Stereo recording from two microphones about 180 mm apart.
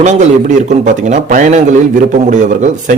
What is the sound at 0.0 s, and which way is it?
Speech, 45° right (ahead or behind).